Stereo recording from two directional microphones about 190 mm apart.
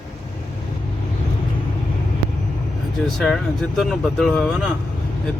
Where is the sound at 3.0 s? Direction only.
Centre (ahead or behind).